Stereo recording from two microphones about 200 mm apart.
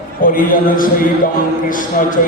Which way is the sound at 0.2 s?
45° left (ahead or behind).